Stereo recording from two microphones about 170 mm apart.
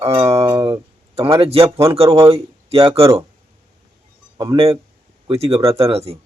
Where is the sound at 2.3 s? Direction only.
35° right (ahead or behind).